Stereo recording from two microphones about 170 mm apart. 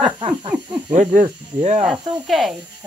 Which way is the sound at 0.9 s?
45° right (ahead or behind).